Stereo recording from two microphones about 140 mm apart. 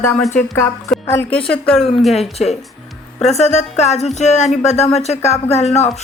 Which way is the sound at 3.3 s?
55° left (ahead or behind).